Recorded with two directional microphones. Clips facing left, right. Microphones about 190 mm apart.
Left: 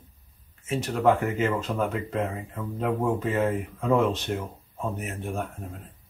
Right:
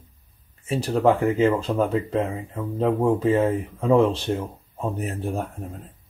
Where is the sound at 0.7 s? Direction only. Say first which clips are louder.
Right 3 dB; 30° right (ahead or behind).